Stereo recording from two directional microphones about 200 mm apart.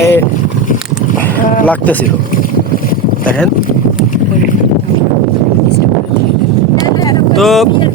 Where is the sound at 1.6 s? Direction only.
10° left (ahead or behind).